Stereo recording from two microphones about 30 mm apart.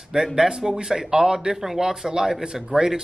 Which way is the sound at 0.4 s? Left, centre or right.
Right.